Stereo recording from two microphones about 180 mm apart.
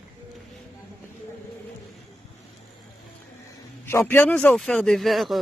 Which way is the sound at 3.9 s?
10° left (ahead or behind).